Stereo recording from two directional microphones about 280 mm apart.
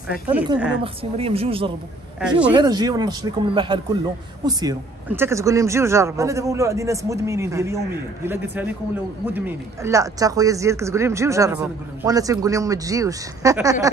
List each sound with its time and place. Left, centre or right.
1.1 s speech: right
2.1 s speech: centre
2.5 s speech: centre
9.2 s speech: centre